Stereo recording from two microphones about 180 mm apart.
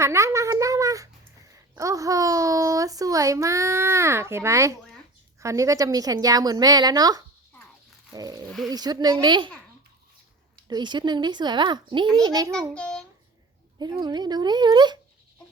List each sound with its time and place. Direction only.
0.0 s a sound: 15° right (ahead or behind)
1.7 s child singing: 20° right (ahead or behind)
5.4 s a woman's voice: 15° right (ahead or behind)
8.1 s a sound: 20° right (ahead or behind)
8.4 s a sound: centre (ahead or behind)
8.7 s a woman's voice: 20° right (ahead or behind)
10.7 s a woman's voice: 25° right (ahead or behind)
12.5 s a child's voice: 5° left (ahead or behind)
13.7 s a woman's voice: 25° right (ahead or behind)